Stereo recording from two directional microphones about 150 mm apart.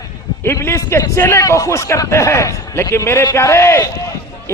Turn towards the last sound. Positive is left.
turn(degrees=20)  # may be behind; listen again after turning